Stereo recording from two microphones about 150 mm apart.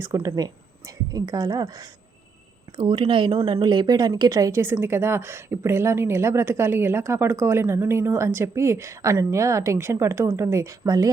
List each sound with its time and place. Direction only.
0.0 s a woman's voice: 20° right (ahead or behind)